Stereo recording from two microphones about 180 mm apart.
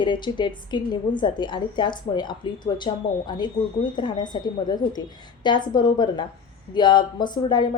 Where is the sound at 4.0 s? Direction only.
25° left (ahead or behind).